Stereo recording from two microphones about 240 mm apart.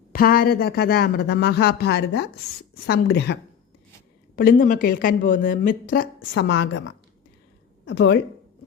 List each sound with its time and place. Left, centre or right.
0.1 s a woman's voice: left
4.4 s a woman's voice: left